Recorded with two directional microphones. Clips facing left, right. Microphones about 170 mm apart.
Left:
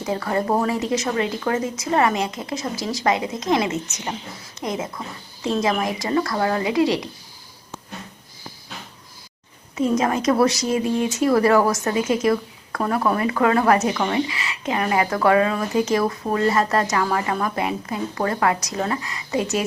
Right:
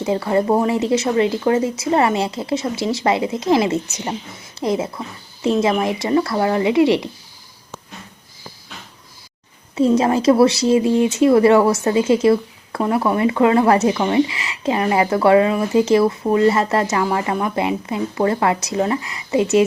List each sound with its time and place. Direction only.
0.0 s speech: 25° right (ahead or behind)
9.7 s speech: 30° right (ahead or behind)